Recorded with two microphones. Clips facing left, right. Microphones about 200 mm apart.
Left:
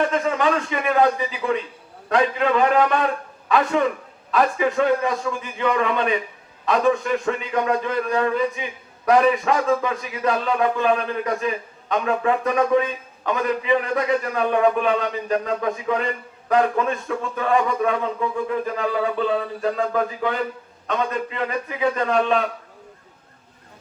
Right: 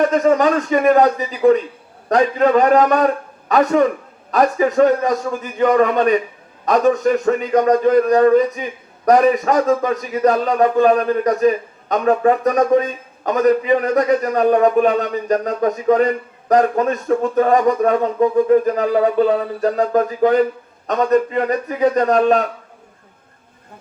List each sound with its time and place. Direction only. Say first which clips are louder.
0.0 s a man's voice: right 7 dB; 45° right (ahead or behind)